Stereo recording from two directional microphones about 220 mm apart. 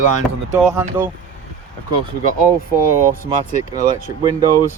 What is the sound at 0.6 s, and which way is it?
Speech, 5° right (ahead or behind).